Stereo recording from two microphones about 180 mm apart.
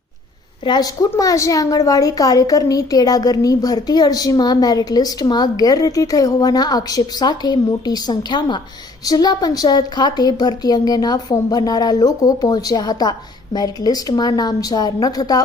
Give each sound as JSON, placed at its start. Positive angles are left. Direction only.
{"t": 0.6, "sound": "a woman's voice", "side_deg": 25}